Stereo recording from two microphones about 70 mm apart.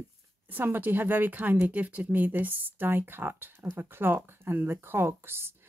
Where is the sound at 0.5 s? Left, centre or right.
Right.